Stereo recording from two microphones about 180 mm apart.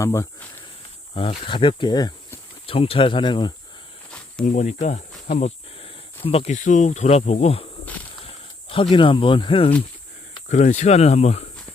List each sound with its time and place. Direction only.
0.0 s speech: 15° left (ahead or behind)
1.1 s speech: 30° left (ahead or behind)
4.4 s speech: 40° left (ahead or behind)
10.5 s speech: 40° left (ahead or behind)